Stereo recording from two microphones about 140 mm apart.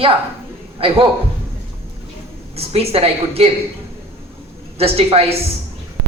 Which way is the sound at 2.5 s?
45° right (ahead or behind).